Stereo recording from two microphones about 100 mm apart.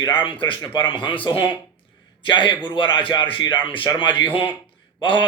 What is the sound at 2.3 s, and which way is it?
A man's voice, 50° left (ahead or behind).